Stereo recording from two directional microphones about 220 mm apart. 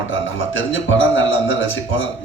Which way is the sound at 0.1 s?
60° left (ahead or behind).